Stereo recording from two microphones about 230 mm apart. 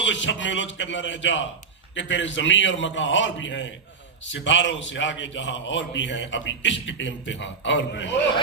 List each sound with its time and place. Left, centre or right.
0.0 s a man's voice: left